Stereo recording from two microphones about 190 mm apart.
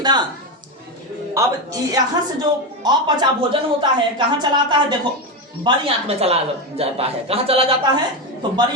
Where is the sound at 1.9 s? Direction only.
20° right (ahead or behind).